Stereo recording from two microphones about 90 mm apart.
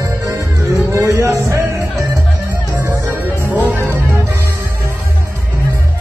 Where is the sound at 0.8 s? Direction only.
30° right (ahead or behind).